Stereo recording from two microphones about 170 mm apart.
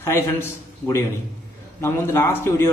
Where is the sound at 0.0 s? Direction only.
15° left (ahead or behind).